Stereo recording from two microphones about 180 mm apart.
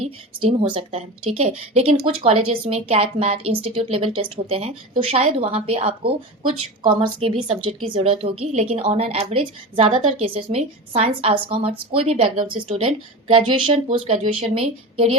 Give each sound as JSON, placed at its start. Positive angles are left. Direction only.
{"t": 0.4, "sound": "a woman's voice", "side_deg": -30}